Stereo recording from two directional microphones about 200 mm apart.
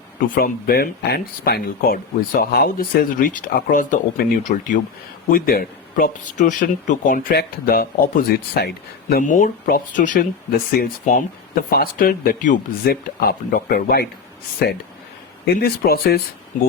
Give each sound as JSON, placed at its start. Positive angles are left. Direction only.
{"t": 0.3, "sound": "speech", "side_deg": 50}
{"t": 15.6, "sound": "speech", "side_deg": 50}